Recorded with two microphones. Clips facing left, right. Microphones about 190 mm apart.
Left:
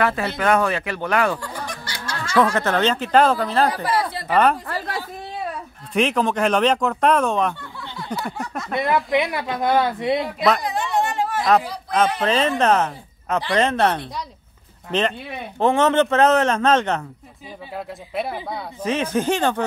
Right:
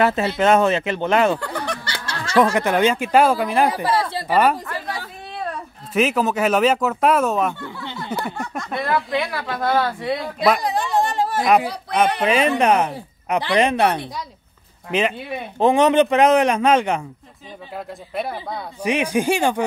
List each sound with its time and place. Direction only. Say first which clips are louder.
0.0 s speech: right 3 dB; 25° right (ahead or behind)
1.4 s snicker: right 5 dB; 65° right (ahead or behind)
2.3 s speech: right 2 dB; 15° right (ahead or behind)
3.7 s speech: right 2 dB; 25° right (ahead or behind)
5.9 s speech: right 1 dB; 5° right (ahead or behind)
8.7 s speech: left 2 dB; 20° left (ahead or behind)
10.6 s a sound: right 2 dB; 35° right (ahead or behind)
12.2 s speech: right 2 dB; 10° right (ahead or behind)
17.7 s speech: even; centre (ahead or behind)
18.8 s speech: right 2 dB; 15° right (ahead or behind)